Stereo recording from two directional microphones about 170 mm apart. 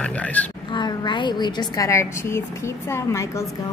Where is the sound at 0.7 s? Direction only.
25° left (ahead or behind).